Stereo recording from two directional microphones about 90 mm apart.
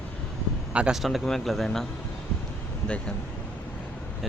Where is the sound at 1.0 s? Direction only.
Centre (ahead or behind).